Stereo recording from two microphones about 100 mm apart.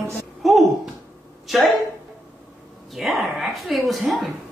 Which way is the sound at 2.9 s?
Centre (ahead or behind).